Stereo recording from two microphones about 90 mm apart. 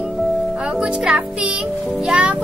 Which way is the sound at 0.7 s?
10° right (ahead or behind).